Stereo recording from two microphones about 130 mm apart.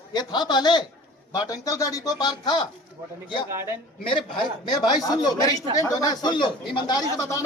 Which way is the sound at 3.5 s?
20° right (ahead or behind).